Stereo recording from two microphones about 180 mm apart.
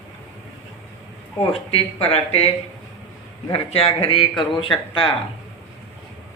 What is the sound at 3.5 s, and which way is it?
A man's voice, 30° left (ahead or behind).